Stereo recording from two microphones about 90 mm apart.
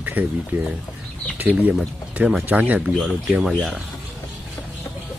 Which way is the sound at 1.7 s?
5° right (ahead or behind).